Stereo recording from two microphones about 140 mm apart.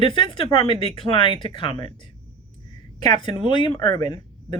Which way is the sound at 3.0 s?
30° left (ahead or behind).